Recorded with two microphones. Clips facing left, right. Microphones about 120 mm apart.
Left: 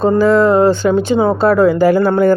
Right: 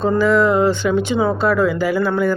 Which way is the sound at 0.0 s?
35° left (ahead or behind).